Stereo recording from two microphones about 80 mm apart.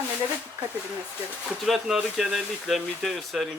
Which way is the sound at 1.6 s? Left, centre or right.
Centre.